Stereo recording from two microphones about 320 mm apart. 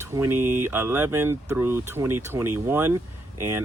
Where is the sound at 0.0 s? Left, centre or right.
Centre.